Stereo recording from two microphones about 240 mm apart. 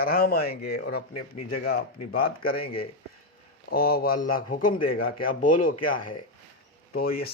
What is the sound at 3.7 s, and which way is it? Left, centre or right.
Speech, left.